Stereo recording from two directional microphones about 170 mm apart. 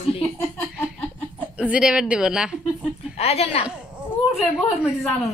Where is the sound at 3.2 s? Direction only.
35° left (ahead or behind).